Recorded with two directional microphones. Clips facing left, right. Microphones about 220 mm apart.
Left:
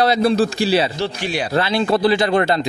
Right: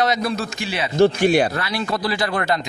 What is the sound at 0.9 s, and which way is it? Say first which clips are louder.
Speech: right 8 dB; 50° right (ahead or behind).